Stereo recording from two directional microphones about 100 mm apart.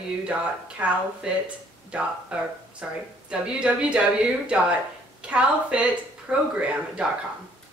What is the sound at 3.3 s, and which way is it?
Speech, 10° right (ahead or behind).